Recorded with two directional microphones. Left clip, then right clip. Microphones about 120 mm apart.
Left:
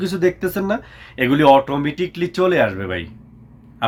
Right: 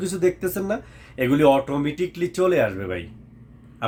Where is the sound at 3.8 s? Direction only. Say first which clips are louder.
Left 6 dB; 25° right (ahead or behind).